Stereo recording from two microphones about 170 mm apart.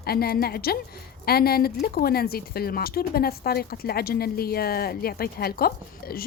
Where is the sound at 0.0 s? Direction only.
65° left (ahead or behind).